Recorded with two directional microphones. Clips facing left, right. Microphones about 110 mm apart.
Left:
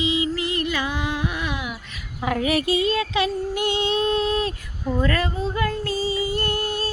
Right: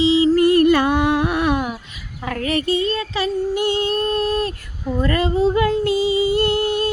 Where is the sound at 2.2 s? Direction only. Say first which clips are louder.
Even; 10° left (ahead or behind).